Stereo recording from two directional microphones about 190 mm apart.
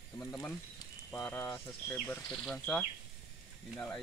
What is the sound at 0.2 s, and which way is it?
Speech, 10° left (ahead or behind).